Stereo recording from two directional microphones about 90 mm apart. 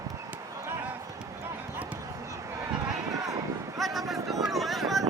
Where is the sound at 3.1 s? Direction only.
40° right (ahead or behind).